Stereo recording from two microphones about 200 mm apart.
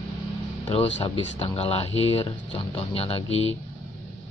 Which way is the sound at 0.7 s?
25° left (ahead or behind).